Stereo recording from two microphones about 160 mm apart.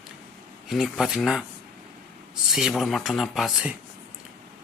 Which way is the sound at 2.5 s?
Centre (ahead or behind).